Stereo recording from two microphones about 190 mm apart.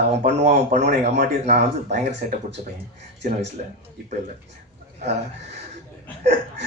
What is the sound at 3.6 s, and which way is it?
Speech, 40° right (ahead or behind).